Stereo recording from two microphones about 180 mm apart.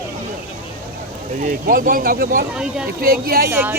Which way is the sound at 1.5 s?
50° right (ahead or behind).